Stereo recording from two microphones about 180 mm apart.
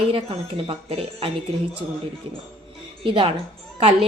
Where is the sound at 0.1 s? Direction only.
30° right (ahead or behind).